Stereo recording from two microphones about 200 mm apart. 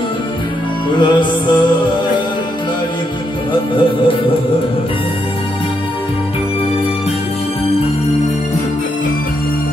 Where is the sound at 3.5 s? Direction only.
25° left (ahead or behind).